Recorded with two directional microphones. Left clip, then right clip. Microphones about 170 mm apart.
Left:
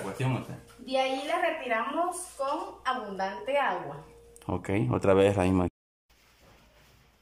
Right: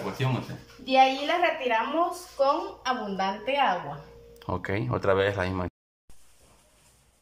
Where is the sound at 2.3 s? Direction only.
25° right (ahead or behind).